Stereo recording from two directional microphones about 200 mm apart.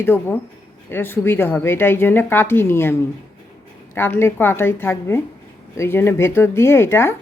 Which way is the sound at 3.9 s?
10° left (ahead or behind).